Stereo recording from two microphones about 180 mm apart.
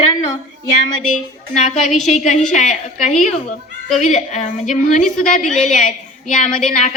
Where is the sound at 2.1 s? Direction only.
40° left (ahead or behind).